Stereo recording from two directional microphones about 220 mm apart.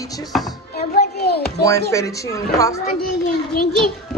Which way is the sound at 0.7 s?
45° left (ahead or behind).